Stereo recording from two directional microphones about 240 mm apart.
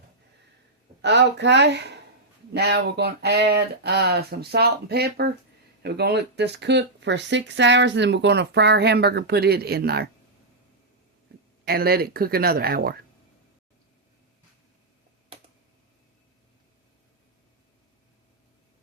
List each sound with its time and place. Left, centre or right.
1.0 s speech: right
11.6 s speech: right